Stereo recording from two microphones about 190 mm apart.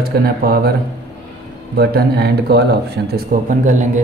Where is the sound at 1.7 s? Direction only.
55° right (ahead or behind).